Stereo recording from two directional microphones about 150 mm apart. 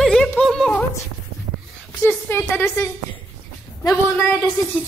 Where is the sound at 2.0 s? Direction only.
15° left (ahead or behind).